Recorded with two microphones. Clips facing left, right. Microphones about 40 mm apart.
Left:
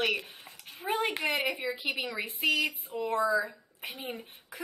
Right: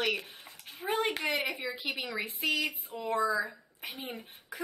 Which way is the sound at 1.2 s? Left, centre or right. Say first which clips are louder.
Left 2 dB; left.